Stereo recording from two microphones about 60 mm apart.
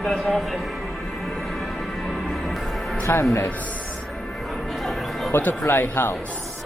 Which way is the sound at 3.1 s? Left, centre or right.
Left.